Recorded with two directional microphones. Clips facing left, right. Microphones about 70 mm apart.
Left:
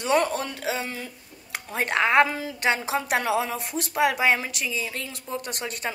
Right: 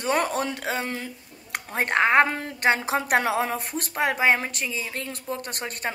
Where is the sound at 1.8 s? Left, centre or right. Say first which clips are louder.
Right 1 dB; right.